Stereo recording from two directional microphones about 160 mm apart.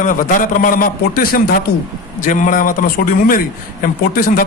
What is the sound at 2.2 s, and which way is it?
A man's voice, 55° left (ahead or behind).